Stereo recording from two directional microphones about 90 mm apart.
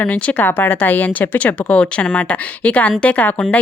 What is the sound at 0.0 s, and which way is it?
Speech, 15° left (ahead or behind).